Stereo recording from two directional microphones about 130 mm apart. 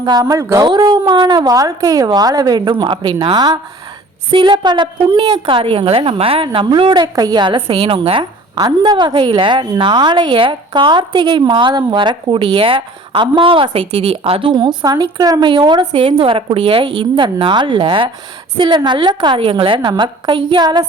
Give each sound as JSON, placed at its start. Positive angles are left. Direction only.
{"t": 0.0, "sound": "a woman's voice", "side_deg": -30}